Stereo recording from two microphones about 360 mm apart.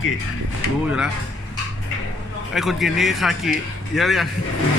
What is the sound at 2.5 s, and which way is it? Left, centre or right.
Speech, centre.